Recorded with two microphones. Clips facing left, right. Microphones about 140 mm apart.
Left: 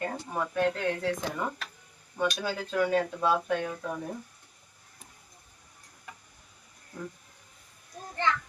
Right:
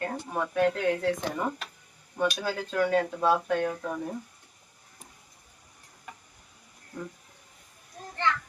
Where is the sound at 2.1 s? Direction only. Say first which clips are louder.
Right 2 dB; centre (ahead or behind).